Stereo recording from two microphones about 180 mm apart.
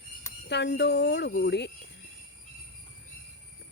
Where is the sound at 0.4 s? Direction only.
70° left (ahead or behind).